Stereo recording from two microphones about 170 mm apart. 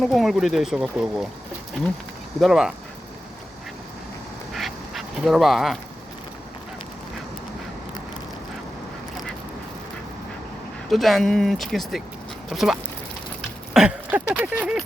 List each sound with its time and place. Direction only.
0.0 s speech: centre (ahead or behind)
2.4 s speech: centre (ahead or behind)
4.5 s duck: centre (ahead or behind)
10.8 s speech: centre (ahead or behind)
13.7 s a sound: 10° right (ahead or behind)